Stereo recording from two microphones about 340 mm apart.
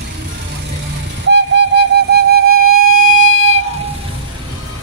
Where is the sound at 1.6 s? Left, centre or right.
Right.